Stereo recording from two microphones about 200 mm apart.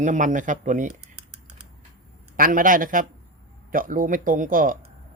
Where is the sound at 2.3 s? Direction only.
45° right (ahead or behind).